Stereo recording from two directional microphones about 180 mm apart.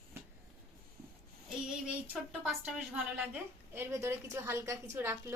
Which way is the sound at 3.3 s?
15° right (ahead or behind).